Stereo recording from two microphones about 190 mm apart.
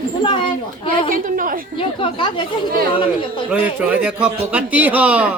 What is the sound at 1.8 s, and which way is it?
Speech, 25° left (ahead or behind).